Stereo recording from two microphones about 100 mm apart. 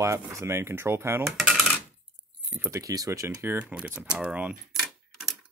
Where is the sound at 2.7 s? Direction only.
35° right (ahead or behind).